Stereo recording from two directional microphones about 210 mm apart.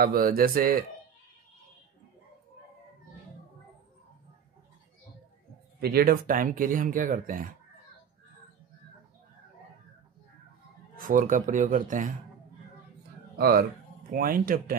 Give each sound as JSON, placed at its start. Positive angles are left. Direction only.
{"t": 0.0, "sound": "speech", "side_deg": -45}
{"t": 5.8, "sound": "speech", "side_deg": -45}
{"t": 11.0, "sound": "speech", "side_deg": -40}
{"t": 13.4, "sound": "speech", "side_deg": -45}